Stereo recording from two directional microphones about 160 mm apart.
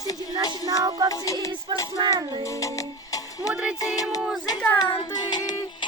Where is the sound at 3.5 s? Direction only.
5° right (ahead or behind).